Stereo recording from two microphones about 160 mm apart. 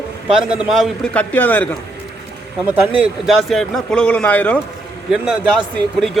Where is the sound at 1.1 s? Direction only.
10° left (ahead or behind).